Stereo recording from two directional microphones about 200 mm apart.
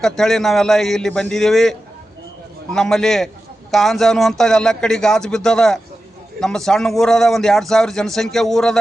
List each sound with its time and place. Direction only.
0.0 s speech: centre (ahead or behind)
2.7 s speech: centre (ahead or behind)